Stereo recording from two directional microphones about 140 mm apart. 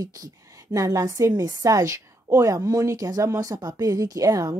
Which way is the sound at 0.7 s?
25° right (ahead or behind).